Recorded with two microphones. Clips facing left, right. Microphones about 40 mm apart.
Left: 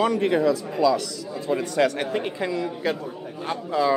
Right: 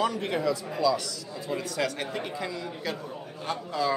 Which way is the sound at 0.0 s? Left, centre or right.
Centre.